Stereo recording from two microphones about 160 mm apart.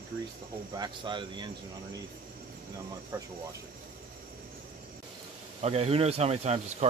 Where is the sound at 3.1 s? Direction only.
20° right (ahead or behind).